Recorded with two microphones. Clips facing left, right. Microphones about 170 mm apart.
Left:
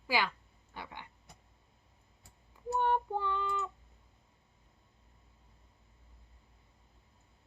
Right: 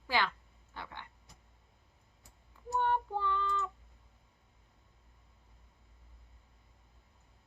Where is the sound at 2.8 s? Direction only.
15° left (ahead or behind).